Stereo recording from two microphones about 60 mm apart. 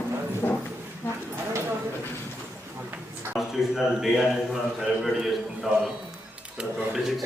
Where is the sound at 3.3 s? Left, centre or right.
Centre.